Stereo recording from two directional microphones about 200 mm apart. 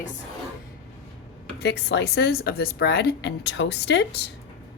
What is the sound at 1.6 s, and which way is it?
Speech, 60° left (ahead or behind).